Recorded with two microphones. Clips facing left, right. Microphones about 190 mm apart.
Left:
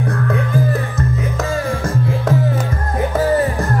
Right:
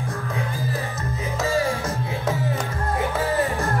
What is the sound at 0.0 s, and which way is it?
Music, 65° left (ahead or behind).